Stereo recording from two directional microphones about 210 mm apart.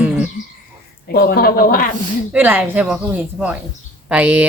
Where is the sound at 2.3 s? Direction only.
10° right (ahead or behind).